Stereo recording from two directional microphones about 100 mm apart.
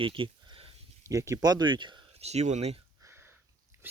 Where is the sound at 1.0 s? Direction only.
30° right (ahead or behind); by 2.0 s 50° right (ahead or behind).